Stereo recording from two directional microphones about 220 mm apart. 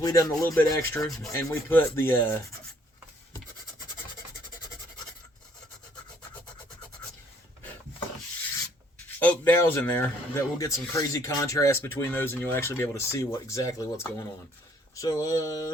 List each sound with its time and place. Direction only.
0.0 s speech: 15° left (ahead or behind)
9.0 s speech: 10° left (ahead or behind)